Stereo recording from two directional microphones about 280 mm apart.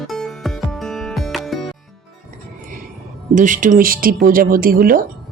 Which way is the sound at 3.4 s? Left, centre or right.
Right.